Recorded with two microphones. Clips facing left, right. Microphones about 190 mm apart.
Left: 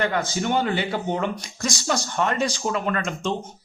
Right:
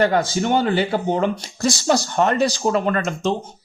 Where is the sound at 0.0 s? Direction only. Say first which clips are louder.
Right 6 dB; 35° right (ahead or behind).